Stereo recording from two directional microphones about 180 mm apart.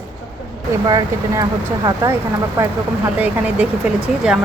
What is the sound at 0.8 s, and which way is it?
A woman's voice, 20° right (ahead or behind).